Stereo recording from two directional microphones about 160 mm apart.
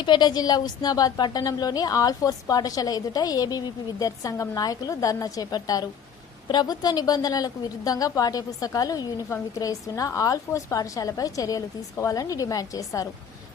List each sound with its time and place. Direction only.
0.0 s a woman's voice: 30° left (ahead or behind)